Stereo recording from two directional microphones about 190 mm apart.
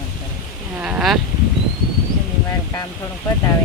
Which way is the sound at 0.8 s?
5° right (ahead or behind).